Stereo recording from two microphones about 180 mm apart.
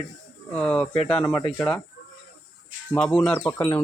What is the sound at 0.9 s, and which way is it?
Speech, 30° left (ahead or behind).